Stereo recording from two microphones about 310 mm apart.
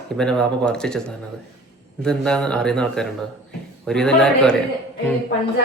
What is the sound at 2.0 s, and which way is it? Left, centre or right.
Speech, centre.